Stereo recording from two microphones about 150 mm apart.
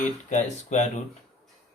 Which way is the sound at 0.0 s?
50° left (ahead or behind).